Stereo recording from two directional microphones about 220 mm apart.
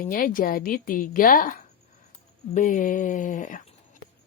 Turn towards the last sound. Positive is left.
turn(degrees=35)  # may be behind; listen again after turning